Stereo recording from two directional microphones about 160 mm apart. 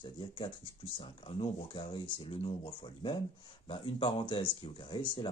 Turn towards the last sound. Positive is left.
turn(degrees=30)  # may be behind; listen again after turning